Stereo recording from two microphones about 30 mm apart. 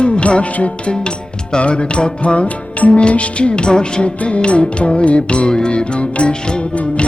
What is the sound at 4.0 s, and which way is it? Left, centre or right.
Music, left.